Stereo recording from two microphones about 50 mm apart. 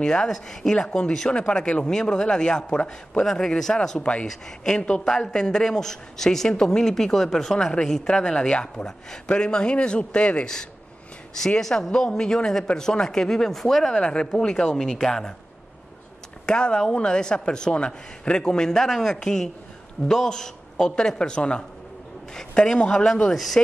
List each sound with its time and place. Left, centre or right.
0.0 s a man's voice: centre
16.4 s speech: centre
23.3 s speech: centre